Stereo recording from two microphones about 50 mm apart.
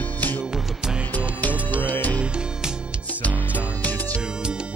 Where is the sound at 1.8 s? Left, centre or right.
Left.